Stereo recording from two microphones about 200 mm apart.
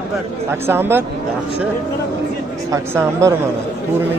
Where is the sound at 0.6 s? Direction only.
10° right (ahead or behind).